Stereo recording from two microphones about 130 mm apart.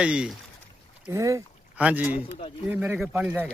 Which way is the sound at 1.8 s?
10° right (ahead or behind).